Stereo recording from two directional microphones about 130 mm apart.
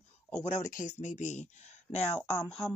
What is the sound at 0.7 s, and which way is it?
Speech, 65° left (ahead or behind).